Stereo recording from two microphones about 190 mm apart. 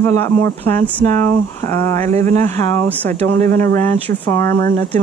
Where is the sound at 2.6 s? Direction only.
10° left (ahead or behind).